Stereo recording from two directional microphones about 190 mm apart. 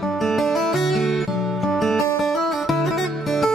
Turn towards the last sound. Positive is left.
turn(degrees=0)  # may be behind; listen again after turning